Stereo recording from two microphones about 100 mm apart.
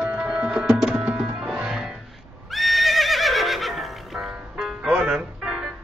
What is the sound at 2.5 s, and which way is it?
Neigh, centre (ahead or behind).